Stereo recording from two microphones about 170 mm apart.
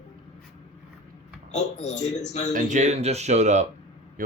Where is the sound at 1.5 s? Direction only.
40° left (ahead or behind).